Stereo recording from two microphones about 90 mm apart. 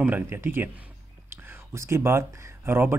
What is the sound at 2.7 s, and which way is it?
Speech, 25° right (ahead or behind).